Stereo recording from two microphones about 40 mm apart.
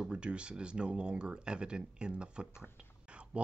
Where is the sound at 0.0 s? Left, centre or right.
Right.